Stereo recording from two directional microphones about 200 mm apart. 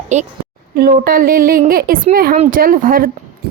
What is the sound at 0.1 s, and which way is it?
Speech, 35° right (ahead or behind).